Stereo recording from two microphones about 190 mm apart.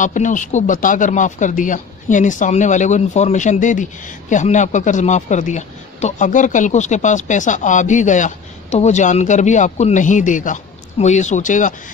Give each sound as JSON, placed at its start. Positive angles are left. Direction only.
{"t": 0.0, "sound": "speech", "side_deg": 40}